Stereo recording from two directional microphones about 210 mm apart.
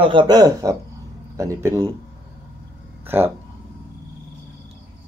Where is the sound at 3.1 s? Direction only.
10° right (ahead or behind).